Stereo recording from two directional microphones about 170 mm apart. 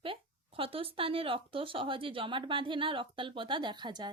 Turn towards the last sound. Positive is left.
turn(degrees=-25)  # may be behind; listen again after turning